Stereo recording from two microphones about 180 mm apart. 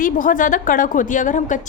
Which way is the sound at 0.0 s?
45° left (ahead or behind).